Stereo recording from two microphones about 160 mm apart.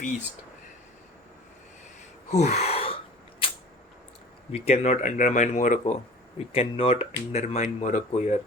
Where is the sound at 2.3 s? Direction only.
45° left (ahead or behind).